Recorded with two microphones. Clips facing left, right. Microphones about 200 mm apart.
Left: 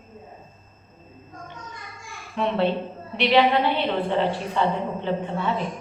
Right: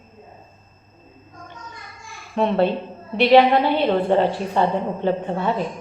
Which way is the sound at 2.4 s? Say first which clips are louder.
Right 4 dB; 40° right (ahead or behind).